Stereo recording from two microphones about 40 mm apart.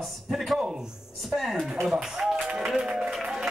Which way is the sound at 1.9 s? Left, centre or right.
Centre.